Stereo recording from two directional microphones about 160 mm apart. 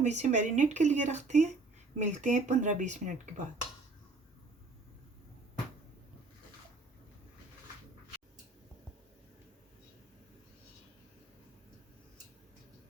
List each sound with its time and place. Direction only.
0.0 s speech: 45° right (ahead or behind)